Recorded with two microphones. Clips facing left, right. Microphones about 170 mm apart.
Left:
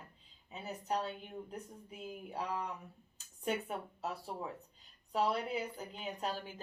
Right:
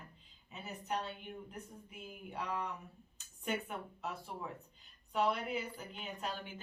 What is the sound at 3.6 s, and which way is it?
Speech, 35° left (ahead or behind).